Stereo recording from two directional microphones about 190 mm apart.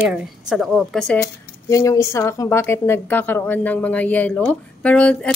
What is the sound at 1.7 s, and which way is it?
A woman's voice, 15° left (ahead or behind).